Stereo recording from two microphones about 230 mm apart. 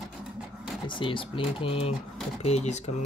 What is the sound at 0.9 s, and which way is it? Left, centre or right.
Speech, left.